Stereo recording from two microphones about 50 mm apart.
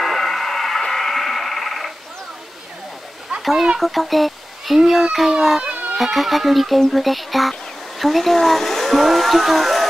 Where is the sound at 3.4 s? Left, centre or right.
Centre.